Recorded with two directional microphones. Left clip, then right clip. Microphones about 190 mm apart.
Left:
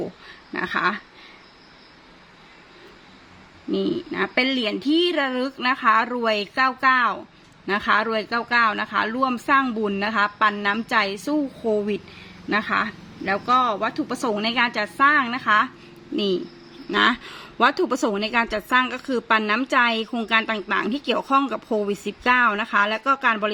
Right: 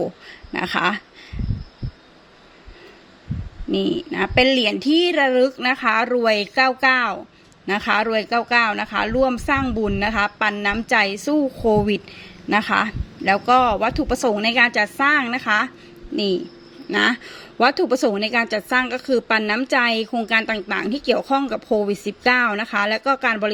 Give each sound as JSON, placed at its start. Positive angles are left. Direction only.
{"t": 0.5, "sound": "speech", "side_deg": -20}
{"t": 3.7, "sound": "a woman's voice", "side_deg": -10}